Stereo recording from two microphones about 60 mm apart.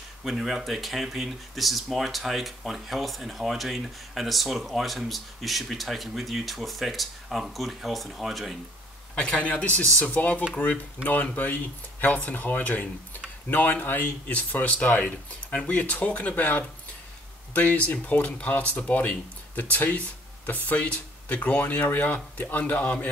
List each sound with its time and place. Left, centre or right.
0.2 s speech: centre
9.1 s speech: centre